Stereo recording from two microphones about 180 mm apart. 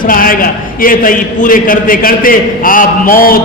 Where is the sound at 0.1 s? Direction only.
50° left (ahead or behind).